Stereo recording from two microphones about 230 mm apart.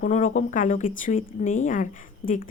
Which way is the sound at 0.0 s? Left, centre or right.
Left.